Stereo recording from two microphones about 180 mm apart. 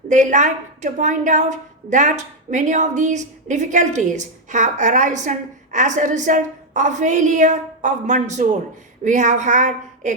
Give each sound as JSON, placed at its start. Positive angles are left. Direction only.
{"t": 0.1, "sound": "a woman's voice", "side_deg": -45}